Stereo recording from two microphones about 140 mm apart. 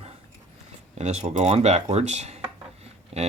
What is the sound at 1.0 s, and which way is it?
Speech, 50° right (ahead or behind).